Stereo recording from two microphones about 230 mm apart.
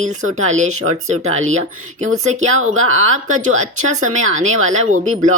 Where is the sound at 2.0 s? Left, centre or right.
Right.